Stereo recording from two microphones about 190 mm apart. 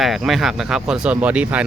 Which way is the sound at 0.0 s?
Centre (ahead or behind).